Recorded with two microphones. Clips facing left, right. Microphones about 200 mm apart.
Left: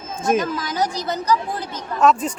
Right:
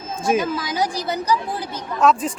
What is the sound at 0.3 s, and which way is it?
Speech, 10° right (ahead or behind).